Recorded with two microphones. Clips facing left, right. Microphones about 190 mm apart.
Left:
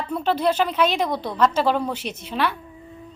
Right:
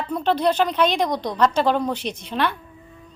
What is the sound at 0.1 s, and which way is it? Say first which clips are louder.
A woman's voice: right 1 dB; 5° left (ahead or behind).